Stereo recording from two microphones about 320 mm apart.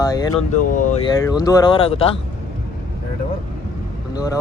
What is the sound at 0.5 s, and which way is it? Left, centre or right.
Speech, left.